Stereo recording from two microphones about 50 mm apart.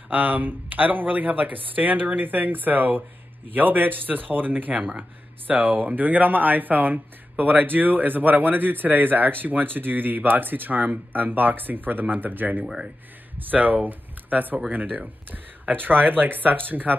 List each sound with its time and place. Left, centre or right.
0.1 s speech: right
12.6 s speech: centre
13.4 s speech: right